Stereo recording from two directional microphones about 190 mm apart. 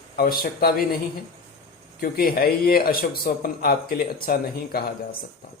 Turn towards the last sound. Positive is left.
turn(degrees=55)  # may be behind; listen again after turning